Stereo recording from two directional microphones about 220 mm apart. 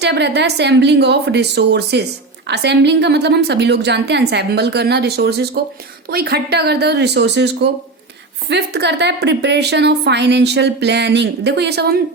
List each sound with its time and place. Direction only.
0.0 s a woman's voice: 50° right (ahead or behind)